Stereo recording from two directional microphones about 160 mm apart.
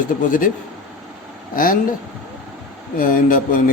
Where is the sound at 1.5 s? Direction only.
60° left (ahead or behind).